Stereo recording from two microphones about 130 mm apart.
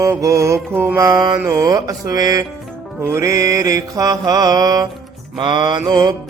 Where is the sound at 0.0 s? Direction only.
25° right (ahead or behind).